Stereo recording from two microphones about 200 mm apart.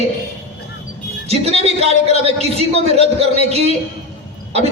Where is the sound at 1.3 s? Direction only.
30° right (ahead or behind).